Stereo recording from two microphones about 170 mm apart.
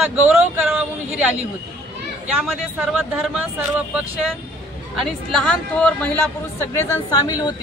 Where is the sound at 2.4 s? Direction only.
5° right (ahead or behind).